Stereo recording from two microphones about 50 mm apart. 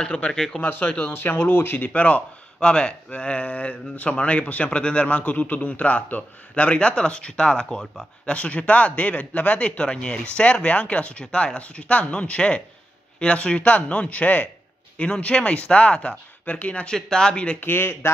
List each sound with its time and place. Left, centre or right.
0.0 s speech: centre
1.1 s speech: left
2.0 s speech: left
16.9 s speech: centre
17.6 s speech: left